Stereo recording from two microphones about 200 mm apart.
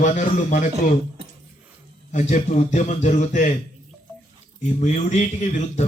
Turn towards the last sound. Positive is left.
turn(degrees=35)  # may be behind; listen again after turning